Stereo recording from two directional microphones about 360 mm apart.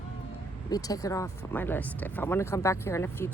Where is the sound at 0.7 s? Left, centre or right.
Centre.